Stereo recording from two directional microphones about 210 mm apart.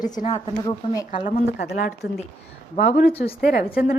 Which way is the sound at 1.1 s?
40° left (ahead or behind).